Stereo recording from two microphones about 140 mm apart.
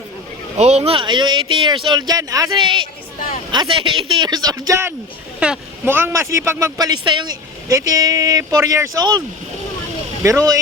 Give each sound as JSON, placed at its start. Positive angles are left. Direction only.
{"t": 0.6, "sound": "speech", "side_deg": -50}
{"t": 2.6, "sound": "speech", "side_deg": -35}
{"t": 10.2, "sound": "speech", "side_deg": -25}